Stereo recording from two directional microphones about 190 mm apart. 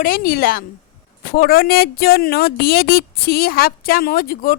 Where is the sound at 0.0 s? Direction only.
50° left (ahead or behind).